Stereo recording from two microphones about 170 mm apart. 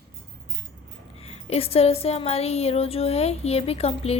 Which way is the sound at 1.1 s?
40° left (ahead or behind).